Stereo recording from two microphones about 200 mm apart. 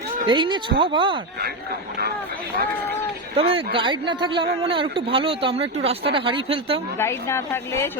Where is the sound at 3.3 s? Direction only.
30° right (ahead or behind).